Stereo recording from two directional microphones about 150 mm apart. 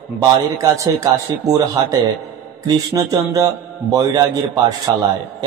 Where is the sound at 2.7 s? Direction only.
25° right (ahead or behind).